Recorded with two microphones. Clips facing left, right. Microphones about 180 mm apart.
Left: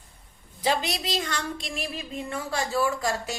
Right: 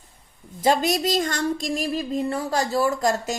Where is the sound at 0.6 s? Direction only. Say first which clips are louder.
Right 6 dB; 45° right (ahead or behind).